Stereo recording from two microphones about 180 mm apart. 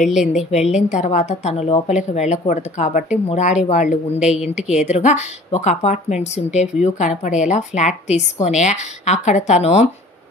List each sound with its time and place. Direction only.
0.0 s a woman's voice: centre (ahead or behind)
0.8 s a woman's voice: 40° left (ahead or behind)
4.2 s a woman's voice: 5° right (ahead or behind)
4.7 s a woman's voice: 40° left (ahead or behind)